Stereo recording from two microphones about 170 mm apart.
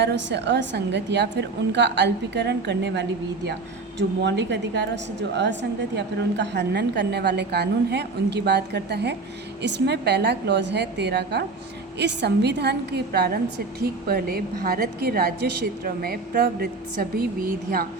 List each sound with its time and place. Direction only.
0.0 s a woman's voice: 85° right
13.1 s a woman's voice: 65° right (ahead or behind)